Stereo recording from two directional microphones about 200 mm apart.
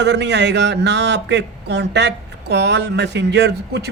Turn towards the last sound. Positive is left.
turn(degrees=-55)  # may be behind; listen again after turning